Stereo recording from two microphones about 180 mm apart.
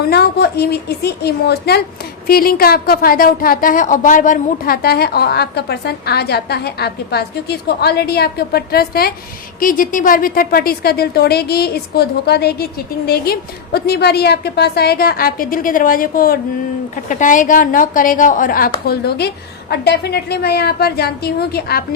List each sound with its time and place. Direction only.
0.0 s a woman's voice: 60° left (ahead or behind)